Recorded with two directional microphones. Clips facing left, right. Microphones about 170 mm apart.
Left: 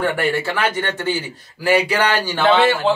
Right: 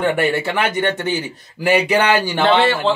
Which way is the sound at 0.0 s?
20° right (ahead or behind).